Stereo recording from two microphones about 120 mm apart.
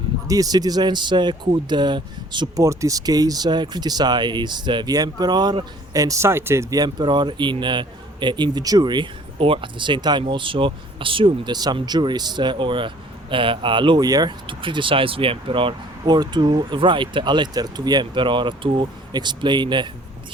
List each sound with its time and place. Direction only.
0.3 s speech: 30° right (ahead or behind)
2.6 s speech: 30° right (ahead or behind)